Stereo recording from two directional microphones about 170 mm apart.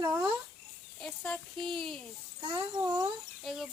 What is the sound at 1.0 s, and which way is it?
Speech, 5° left (ahead or behind).